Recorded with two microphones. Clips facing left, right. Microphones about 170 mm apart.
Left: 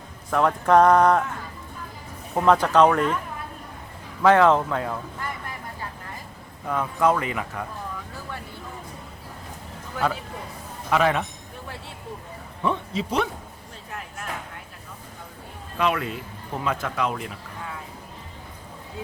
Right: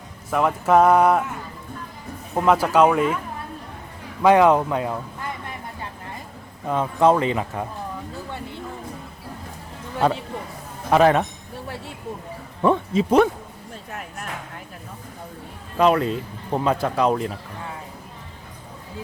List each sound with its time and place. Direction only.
0.3 s speech: 5° right (ahead or behind)
2.3 s speech: 5° right (ahead or behind)
4.2 s speech: 15° right (ahead or behind)
6.7 s speech: 25° right (ahead or behind)
10.0 s speech: 30° right (ahead or behind)
12.6 s speech: 50° right (ahead or behind)
15.8 s speech: 35° right (ahead or behind)